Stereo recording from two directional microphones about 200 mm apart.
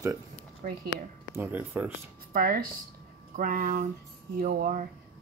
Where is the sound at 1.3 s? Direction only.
10° right (ahead or behind).